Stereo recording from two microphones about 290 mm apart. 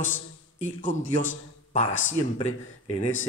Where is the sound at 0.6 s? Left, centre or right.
Left.